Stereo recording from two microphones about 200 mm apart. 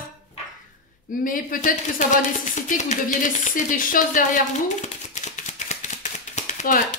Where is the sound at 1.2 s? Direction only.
45° left (ahead or behind).